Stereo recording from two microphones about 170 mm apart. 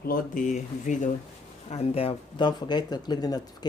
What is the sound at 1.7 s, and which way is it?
Speech, 35° left (ahead or behind).